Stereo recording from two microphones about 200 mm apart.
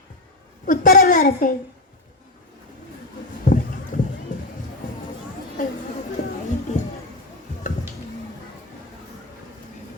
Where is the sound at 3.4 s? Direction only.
40° left (ahead or behind).